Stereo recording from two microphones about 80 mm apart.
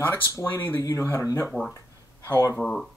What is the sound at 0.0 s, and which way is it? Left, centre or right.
Speech, left.